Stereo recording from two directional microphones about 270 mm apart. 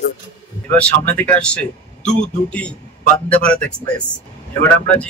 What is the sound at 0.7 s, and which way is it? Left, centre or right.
A man's voice, centre.